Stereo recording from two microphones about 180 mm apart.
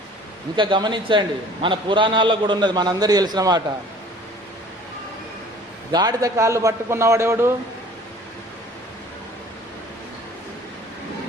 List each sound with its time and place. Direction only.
0.5 s a man's voice: 25° right (ahead or behind)
5.9 s a man's voice: 20° right (ahead or behind)